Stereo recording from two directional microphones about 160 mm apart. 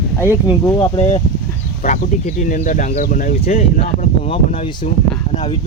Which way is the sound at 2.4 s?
55° left (ahead or behind).